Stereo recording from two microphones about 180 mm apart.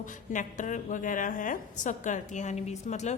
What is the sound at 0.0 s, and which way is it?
A woman's voice, 45° left (ahead or behind).